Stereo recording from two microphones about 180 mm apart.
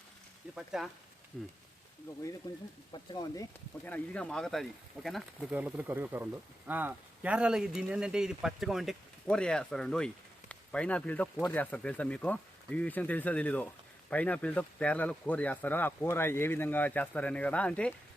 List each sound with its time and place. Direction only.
0.5 s speech: centre (ahead or behind)
2.9 s speech: 25° left (ahead or behind)
3.8 s speech: 5° left (ahead or behind)